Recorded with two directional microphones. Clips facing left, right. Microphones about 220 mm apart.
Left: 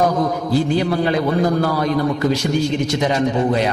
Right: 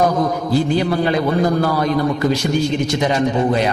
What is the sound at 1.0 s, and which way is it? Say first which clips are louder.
A man's voice: right 1 dB; 40° left (ahead or behind).